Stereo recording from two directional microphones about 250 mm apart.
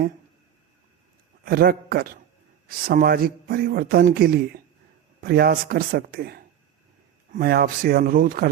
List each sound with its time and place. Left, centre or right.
1.5 s a man's voice: right